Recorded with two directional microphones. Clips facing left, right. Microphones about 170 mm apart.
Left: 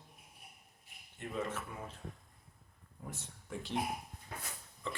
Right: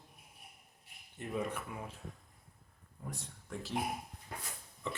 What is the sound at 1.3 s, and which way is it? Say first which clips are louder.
Speech: right 1 dB; 10° right (ahead or behind).